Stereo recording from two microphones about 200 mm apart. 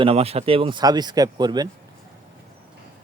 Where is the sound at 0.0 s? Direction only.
30° right (ahead or behind).